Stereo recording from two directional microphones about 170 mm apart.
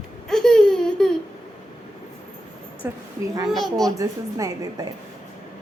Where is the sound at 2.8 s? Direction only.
15° right (ahead or behind).